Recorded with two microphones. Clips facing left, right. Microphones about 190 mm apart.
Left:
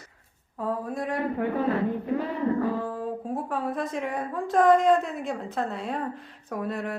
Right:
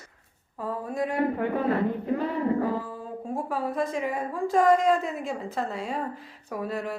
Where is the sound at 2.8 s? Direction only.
Centre (ahead or behind).